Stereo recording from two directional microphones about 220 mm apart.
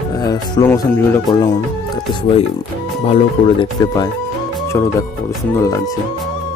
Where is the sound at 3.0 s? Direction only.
25° left (ahead or behind).